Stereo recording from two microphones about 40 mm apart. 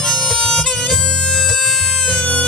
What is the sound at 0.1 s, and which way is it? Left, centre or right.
Music, centre.